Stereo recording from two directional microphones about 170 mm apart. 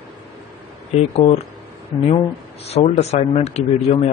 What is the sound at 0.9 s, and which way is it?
Speech, 35° left (ahead or behind).